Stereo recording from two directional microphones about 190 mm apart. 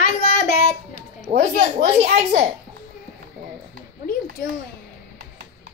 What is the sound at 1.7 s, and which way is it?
Speech, 35° right (ahead or behind).